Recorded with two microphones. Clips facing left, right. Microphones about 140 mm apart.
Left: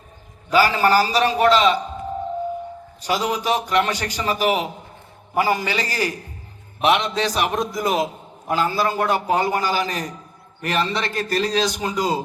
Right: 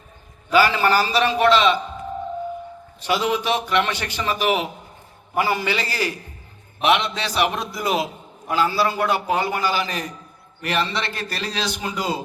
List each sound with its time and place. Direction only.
0.5 s a man's voice: 40° left (ahead or behind)
3.0 s a man's voice: 40° left (ahead or behind)